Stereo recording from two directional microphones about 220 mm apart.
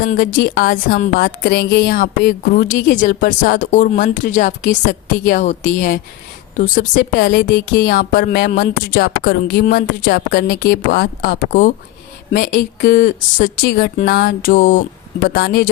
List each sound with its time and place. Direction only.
0.0 s speech: 40° left (ahead or behind)
7.3 s speech: 55° left (ahead or behind)
7.6 s speech: 40° left (ahead or behind)
12.8 s speech: 40° left (ahead or behind)